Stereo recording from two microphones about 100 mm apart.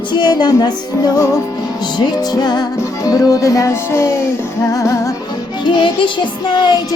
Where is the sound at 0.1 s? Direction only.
45° left (ahead or behind).